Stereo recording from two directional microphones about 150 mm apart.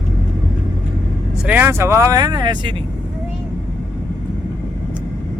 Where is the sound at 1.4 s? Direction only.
10° right (ahead or behind); by 2.8 s 30° right (ahead or behind).